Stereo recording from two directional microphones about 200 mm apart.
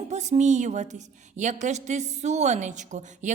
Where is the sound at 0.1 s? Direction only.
35° right (ahead or behind).